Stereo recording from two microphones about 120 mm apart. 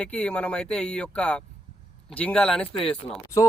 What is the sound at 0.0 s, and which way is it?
Speech, 10° left (ahead or behind).